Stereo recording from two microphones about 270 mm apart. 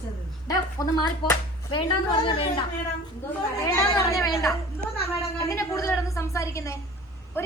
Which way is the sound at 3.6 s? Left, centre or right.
Centre.